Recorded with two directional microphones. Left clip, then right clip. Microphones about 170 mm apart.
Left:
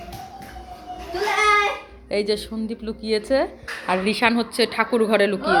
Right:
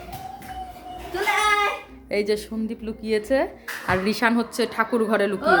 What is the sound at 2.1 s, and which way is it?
A woman's voice, 10° right (ahead or behind).